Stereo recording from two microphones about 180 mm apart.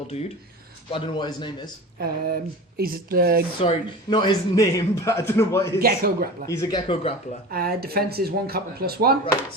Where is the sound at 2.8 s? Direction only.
55° right (ahead or behind).